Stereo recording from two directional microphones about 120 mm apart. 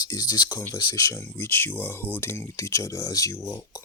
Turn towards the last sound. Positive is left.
turn(degrees=20)  # may be behind; listen again after turning